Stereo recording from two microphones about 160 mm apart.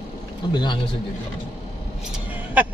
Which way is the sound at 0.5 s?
30° left (ahead or behind).